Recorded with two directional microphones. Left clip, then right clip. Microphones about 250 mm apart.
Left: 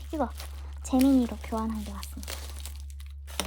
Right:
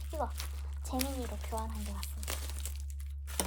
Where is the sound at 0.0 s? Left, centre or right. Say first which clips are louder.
Left 6 dB; centre.